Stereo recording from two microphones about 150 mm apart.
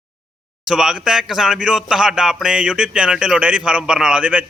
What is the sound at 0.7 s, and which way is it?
Speech, 5° right (ahead or behind).